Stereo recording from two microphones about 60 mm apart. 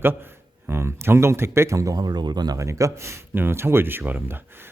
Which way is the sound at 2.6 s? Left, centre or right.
Right.